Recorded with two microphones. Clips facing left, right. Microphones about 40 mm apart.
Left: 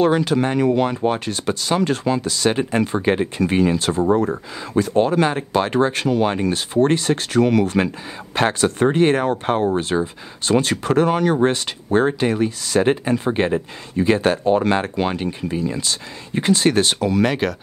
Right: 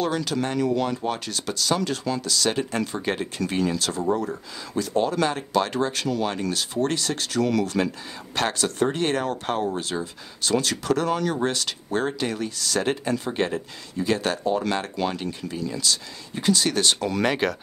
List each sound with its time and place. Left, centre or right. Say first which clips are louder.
0.0 s speech: left 8 dB; left
14.4 s speech: left 7 dB; left
14.7 s speech: left 6 dB; left
17.0 s speech: left 4 dB; centre